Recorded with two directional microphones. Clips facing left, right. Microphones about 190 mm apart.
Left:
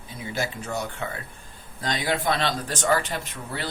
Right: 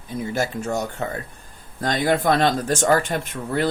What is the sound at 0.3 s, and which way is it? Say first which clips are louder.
Speech: right 4 dB; 45° right (ahead or behind).